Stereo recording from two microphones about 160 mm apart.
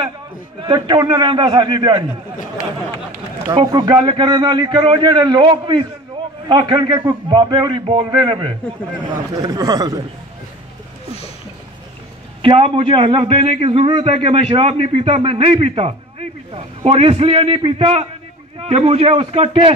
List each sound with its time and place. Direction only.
0.6 s a man's voice: 30° right (ahead or behind)
3.5 s a man's voice: 30° right (ahead or behind)
12.4 s a man's voice: 35° right (ahead or behind)